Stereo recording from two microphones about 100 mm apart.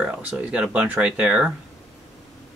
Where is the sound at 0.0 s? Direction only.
15° right (ahead or behind).